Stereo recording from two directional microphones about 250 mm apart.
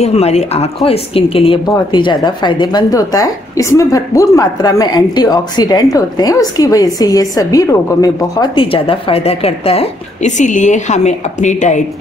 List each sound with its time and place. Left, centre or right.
0.0 s a woman's voice: left